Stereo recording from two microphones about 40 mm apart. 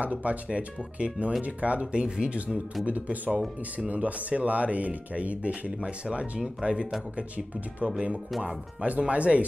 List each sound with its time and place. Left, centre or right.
0.0 s speech: right
2.8 s speech: right